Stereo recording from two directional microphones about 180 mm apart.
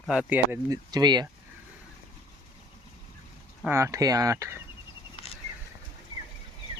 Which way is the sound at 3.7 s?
15° right (ahead or behind).